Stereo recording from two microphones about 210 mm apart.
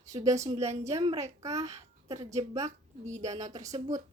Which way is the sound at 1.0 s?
25° right (ahead or behind).